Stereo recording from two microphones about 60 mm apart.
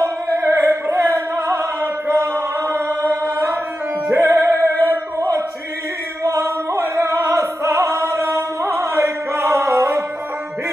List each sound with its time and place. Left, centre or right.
0.0 s opera: right
3.3 s chant: right
4.1 s music: right
4.8 s a sound: right
6.2 s music: right